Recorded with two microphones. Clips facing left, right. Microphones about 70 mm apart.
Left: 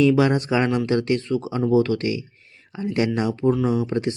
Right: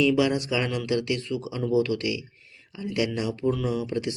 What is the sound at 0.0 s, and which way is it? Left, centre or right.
Speech, left.